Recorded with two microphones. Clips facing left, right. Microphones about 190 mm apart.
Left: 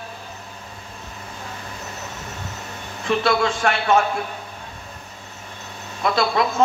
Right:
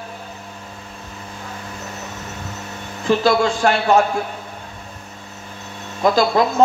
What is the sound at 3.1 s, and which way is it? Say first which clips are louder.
Speech: right 4 dB; 30° right (ahead or behind).